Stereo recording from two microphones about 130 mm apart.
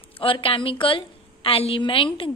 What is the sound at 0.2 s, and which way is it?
A woman's voice, 45° left (ahead or behind).